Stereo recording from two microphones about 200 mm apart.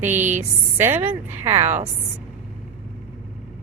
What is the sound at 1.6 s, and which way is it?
Speech, 35° right (ahead or behind).